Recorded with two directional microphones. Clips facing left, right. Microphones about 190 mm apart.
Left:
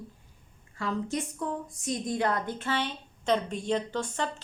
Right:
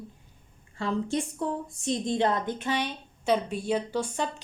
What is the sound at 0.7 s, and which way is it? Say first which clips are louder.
A woman's voice: right 3 dB; 30° right (ahead or behind).